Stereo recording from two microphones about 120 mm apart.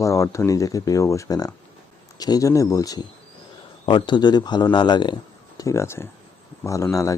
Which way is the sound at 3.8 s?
40° left (ahead or behind).